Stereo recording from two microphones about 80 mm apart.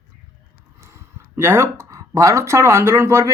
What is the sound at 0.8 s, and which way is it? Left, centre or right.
Speech, right.